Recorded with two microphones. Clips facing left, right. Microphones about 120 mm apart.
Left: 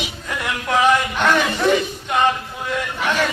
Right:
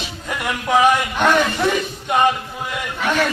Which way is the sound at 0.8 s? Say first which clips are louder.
Left 2 dB; 15° right (ahead or behind).